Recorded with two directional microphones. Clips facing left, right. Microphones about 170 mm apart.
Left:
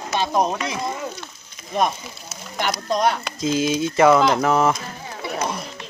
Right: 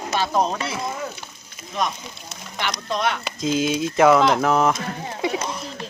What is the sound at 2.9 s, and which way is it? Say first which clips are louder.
Speech: left 4 dB; 40° left (ahead or behind).